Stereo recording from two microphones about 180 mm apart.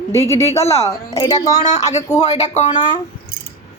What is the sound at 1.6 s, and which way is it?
Speech, 40° left (ahead or behind).